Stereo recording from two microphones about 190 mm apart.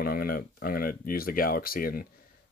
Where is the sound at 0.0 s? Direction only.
50° left (ahead or behind).